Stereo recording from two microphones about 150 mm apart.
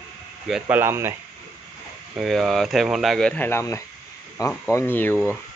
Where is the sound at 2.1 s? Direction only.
Centre (ahead or behind).